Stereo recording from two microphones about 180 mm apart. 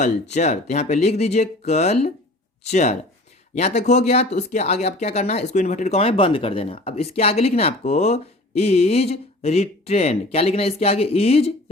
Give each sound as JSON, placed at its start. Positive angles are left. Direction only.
{"t": 0.0, "sound": "speech", "side_deg": 40}